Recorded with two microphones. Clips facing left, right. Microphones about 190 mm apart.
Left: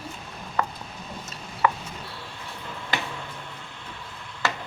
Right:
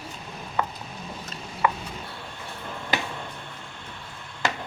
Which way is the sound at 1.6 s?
20° right (ahead or behind).